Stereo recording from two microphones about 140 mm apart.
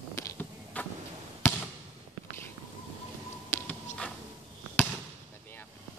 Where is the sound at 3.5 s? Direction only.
10° left (ahead or behind).